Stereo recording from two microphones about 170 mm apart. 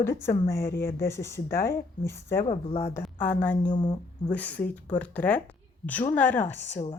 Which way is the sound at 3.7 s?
25° left (ahead or behind).